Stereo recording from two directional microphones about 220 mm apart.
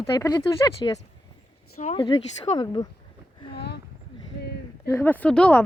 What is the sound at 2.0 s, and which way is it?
Speech, 20° left (ahead or behind).